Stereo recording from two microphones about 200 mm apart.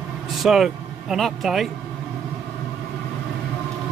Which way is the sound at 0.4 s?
Centre (ahead or behind).